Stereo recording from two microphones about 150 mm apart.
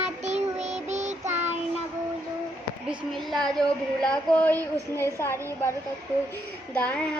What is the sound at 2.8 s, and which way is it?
A woman's voice, centre (ahead or behind).